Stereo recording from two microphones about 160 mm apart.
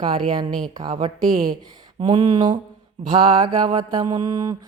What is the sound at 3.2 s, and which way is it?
Mantra, 30° right (ahead or behind).